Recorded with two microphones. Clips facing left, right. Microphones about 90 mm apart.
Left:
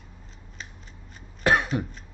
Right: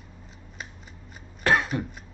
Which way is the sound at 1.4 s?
15° left (ahead or behind).